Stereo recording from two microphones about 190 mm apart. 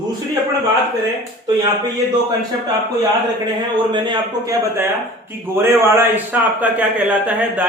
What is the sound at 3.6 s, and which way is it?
A man's voice, 25° right (ahead or behind).